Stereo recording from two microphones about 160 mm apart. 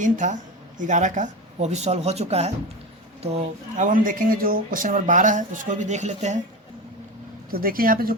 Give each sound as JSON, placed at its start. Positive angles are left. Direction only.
{"t": 0.0, "sound": "speech", "side_deg": -50}
{"t": 3.3, "sound": "speech", "side_deg": -55}
{"t": 7.5, "sound": "speech", "side_deg": -65}